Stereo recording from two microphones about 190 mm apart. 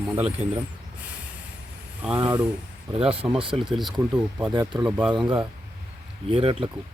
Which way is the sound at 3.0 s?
30° right (ahead or behind).